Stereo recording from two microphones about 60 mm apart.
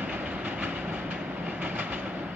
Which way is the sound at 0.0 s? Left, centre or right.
Right.